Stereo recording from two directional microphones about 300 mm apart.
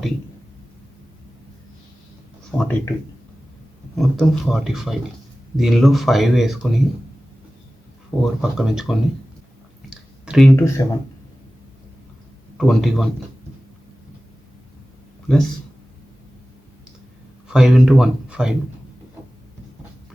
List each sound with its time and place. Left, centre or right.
2.5 s speech: centre
3.9 s speech: centre
8.2 s speech: centre
9.9 s a sound: centre
12.5 s speech: centre
15.3 s speech: centre
17.5 s speech: centre